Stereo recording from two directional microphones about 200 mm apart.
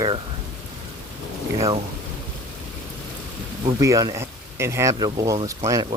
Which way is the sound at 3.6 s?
15° right (ahead or behind).